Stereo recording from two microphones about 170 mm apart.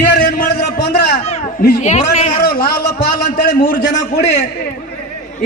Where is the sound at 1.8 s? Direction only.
45° left (ahead or behind).